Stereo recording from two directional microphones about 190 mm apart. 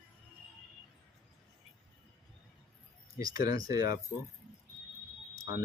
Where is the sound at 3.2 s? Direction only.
20° right (ahead or behind).